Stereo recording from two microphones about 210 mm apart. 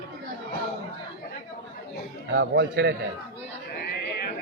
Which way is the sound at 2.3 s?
55° right (ahead or behind).